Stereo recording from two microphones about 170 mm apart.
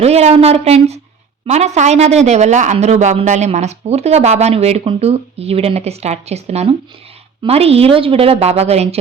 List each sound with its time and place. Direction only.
0.0 s speech: 40° right (ahead or behind)